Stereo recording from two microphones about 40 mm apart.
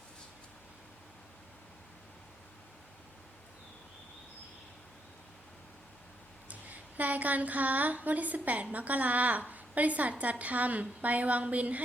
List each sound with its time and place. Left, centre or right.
6.5 s a woman's voice: right